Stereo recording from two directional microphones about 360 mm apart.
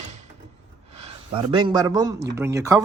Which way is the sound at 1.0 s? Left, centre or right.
Centre.